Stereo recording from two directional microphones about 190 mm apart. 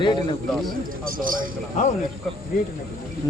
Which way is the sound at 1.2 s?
45° right (ahead or behind).